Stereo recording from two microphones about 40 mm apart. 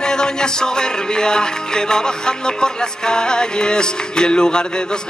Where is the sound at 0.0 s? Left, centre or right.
Centre.